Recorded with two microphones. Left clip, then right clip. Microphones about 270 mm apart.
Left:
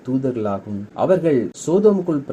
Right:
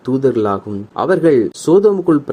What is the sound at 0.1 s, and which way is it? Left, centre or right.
Speech, right.